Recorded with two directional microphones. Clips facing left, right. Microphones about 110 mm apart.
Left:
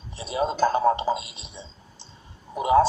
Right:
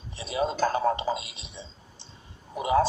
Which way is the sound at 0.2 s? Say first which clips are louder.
Left 2 dB; 35° left (ahead or behind).